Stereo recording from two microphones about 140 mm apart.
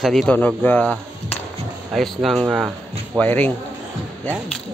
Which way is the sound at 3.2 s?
10° left (ahead or behind).